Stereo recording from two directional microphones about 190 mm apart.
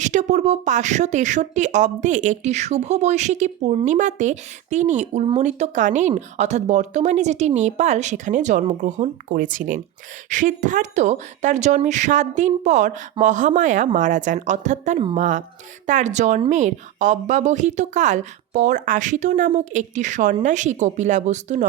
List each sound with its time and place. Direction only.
0.0 s speech: 40° right (ahead or behind)